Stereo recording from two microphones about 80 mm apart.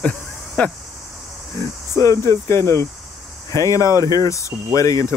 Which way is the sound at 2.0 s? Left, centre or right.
Left.